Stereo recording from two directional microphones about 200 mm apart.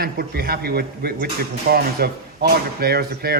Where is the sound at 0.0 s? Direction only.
50° right (ahead or behind).